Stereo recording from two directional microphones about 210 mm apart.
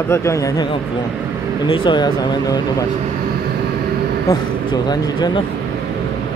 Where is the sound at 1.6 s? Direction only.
20° left (ahead or behind).